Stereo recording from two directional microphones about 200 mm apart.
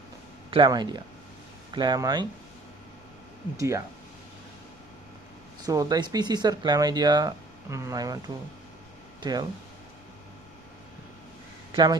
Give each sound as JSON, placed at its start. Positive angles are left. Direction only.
{"t": 0.5, "sound": "speech", "side_deg": -20}
{"t": 3.6, "sound": "speech", "side_deg": -15}
{"t": 5.6, "sound": "speech", "side_deg": -20}
{"t": 9.2, "sound": "speech", "side_deg": -20}
{"t": 11.7, "sound": "speech", "side_deg": -20}